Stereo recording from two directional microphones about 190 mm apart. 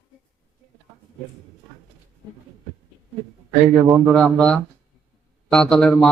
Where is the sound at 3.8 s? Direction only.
Centre (ahead or behind).